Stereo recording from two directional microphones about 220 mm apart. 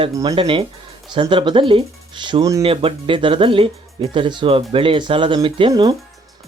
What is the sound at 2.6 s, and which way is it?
Speech, 25° right (ahead or behind).